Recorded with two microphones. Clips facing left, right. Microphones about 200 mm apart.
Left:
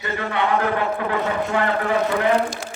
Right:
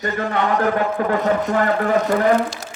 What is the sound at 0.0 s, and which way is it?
A man's voice, 45° right (ahead or behind).